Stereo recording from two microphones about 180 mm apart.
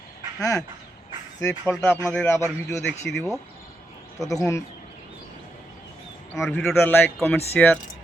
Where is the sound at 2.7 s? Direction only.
Centre (ahead or behind).